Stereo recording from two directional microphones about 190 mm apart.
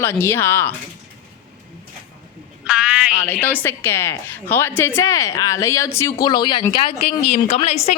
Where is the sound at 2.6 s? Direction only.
5° right (ahead or behind).